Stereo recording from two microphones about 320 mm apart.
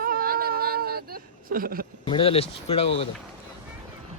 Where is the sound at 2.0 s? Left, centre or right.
Centre.